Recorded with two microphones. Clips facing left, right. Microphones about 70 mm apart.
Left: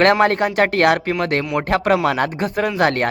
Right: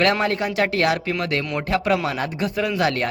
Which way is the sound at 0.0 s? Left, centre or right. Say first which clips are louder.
Left 6 dB; left.